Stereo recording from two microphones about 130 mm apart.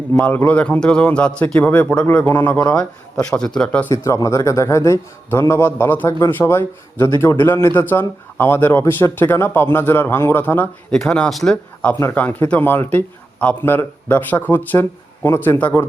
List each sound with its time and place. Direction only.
0.2 s a man's voice: 15° left (ahead or behind)
3.9 s a man's voice: 25° left (ahead or behind)